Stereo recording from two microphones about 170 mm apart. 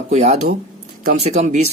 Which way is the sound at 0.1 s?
40° right (ahead or behind).